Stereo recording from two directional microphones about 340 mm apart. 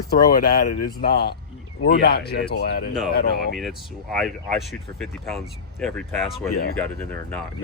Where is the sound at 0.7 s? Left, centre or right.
Left.